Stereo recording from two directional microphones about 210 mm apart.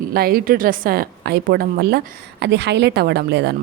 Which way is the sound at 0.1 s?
45° right (ahead or behind).